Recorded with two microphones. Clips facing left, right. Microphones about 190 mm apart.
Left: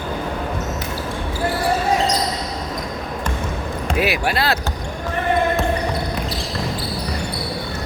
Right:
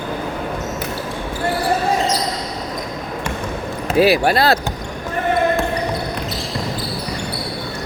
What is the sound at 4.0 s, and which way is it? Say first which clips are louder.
Speech: right 7 dB; 35° right (ahead or behind).